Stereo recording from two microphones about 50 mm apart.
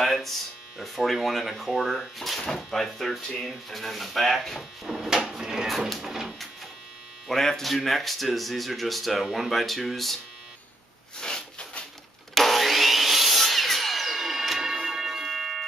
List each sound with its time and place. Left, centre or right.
0.0 s a sound: centre
0.7 s speech: centre
4.8 s speech: centre
7.2 s speech: centre
11.1 s a sound: centre
12.4 s vacuum cleaner: centre